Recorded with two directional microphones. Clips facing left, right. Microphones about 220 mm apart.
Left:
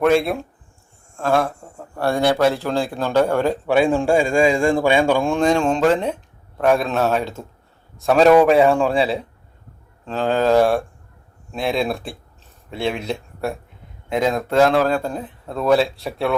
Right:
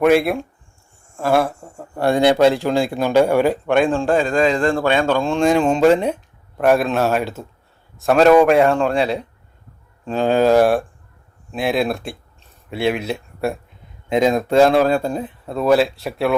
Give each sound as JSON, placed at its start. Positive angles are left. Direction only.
{"t": 0.0, "sound": "a man's voice", "side_deg": -5}
{"t": 3.7, "sound": "a man's voice", "side_deg": 10}
{"t": 5.4, "sound": "a man's voice", "side_deg": -5}
{"t": 10.1, "sound": "a man's voice", "side_deg": -15}